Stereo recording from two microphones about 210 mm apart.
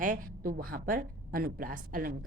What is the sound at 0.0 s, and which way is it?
A woman's voice, 40° right (ahead or behind).